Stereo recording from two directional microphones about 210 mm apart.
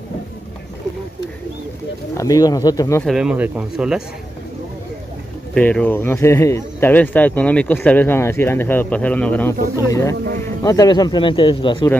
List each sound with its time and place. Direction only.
2.1 s speech: 15° left (ahead or behind)
3.1 s speech: 5° right (ahead or behind)
5.5 s speech: 5° left (ahead or behind)
10.6 s speech: 15° left (ahead or behind)